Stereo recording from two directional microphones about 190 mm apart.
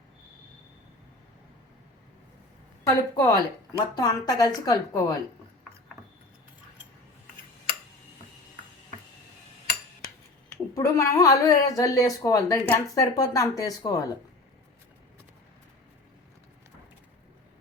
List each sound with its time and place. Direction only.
2.8 s a woman's voice: 20° left (ahead or behind)
10.8 s speech: 15° left (ahead or behind)